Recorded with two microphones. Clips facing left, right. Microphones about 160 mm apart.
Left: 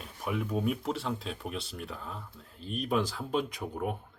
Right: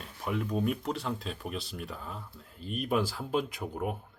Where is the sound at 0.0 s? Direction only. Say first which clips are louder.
Even; 5° left (ahead or behind).